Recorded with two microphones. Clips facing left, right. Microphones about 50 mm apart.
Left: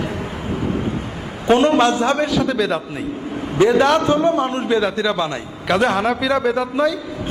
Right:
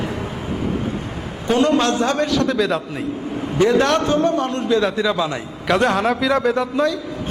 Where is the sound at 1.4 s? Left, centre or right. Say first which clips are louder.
Left 2 dB; left.